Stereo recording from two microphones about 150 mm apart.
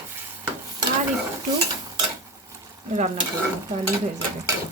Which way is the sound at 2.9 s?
50° right (ahead or behind).